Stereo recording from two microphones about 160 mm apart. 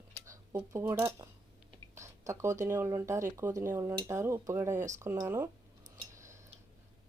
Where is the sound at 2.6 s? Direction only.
20° right (ahead or behind).